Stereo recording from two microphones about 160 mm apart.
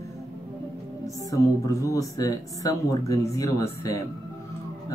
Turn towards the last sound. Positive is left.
turn(degrees=20)  # may be behind; listen again after turning